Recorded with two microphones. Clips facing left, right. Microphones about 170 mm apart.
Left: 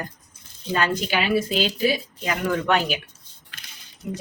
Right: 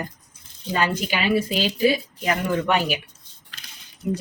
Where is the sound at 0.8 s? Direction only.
10° right (ahead or behind).